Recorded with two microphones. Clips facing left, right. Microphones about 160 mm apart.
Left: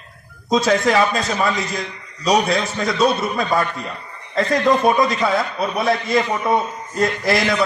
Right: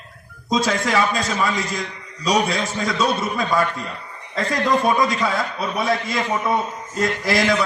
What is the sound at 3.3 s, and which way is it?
Speech, 40° left (ahead or behind).